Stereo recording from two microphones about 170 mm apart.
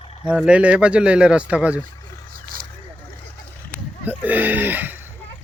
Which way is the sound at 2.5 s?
55° right (ahead or behind).